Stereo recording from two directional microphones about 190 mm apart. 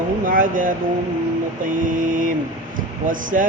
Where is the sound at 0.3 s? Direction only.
45° right (ahead or behind).